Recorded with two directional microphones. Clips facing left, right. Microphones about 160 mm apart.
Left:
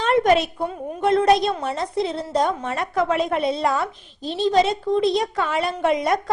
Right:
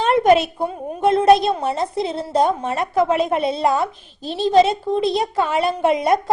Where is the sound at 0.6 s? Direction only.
30° right (ahead or behind).